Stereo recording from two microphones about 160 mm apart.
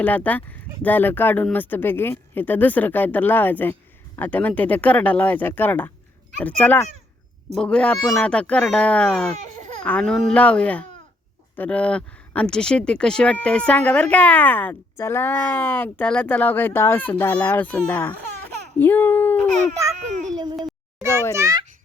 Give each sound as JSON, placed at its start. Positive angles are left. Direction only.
{"t": 0.0, "sound": "a child's voice", "side_deg": 10}
{"t": 20.1, "sound": "a sound", "side_deg": -50}
{"t": 21.3, "sound": "a child's voice", "side_deg": -20}